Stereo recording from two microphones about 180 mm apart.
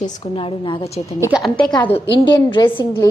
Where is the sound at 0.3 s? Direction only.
30° left (ahead or behind).